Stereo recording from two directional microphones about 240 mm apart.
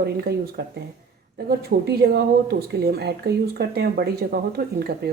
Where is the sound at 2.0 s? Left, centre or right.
Right.